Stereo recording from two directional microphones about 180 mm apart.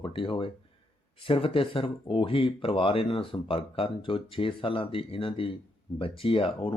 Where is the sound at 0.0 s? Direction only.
30° left (ahead or behind).